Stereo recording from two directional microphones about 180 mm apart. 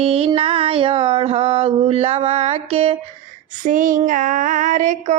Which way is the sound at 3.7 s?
50° right (ahead or behind).